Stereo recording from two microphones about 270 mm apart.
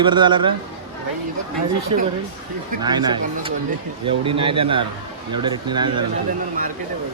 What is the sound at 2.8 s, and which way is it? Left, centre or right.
Speech, centre.